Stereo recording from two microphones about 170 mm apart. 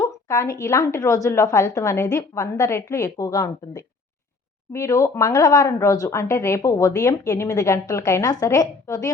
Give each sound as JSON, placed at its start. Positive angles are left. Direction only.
{"t": 0.0, "sound": "speech", "side_deg": 20}